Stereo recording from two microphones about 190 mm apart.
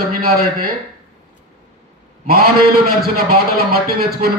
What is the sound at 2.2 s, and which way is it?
A man's voice, 55° right (ahead or behind).